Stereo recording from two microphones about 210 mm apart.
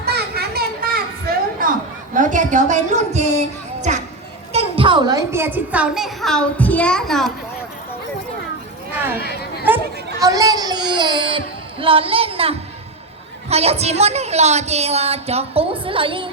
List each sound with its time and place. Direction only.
0.0 s a sound: 50° right (ahead or behind)
1.6 s chatter: 40° right (ahead or behind)
2.1 s a woman's voice: 35° right (ahead or behind); by 7.3 s centre (ahead or behind)
9.2 s chatter: 50° left (ahead or behind)
9.6 s a sound: 15° right (ahead or behind)
13.5 s a woman's voice: 30° right (ahead or behind)